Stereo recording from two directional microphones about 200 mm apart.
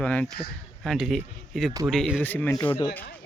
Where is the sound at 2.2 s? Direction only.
10° left (ahead or behind).